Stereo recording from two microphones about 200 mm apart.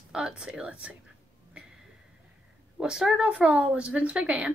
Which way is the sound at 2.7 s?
5° right (ahead or behind).